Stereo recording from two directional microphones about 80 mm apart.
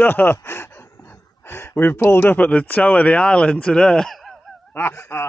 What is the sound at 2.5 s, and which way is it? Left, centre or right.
Speech, centre.